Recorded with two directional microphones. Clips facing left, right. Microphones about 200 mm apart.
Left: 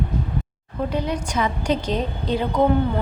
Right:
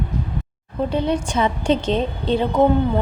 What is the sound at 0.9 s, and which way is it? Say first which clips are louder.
Speech: right 5 dB; 30° right (ahead or behind).